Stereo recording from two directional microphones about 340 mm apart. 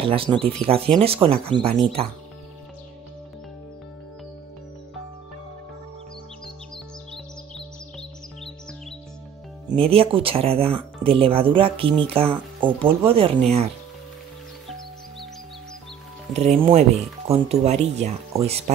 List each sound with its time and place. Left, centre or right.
0.0 s speech: centre
9.7 s speech: centre
16.3 s speech: centre